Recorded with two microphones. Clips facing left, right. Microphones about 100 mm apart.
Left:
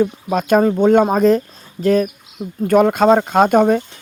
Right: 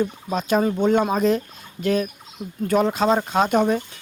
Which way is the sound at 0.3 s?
50° left (ahead or behind).